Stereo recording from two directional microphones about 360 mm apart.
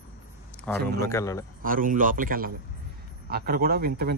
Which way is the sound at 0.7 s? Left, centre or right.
Centre.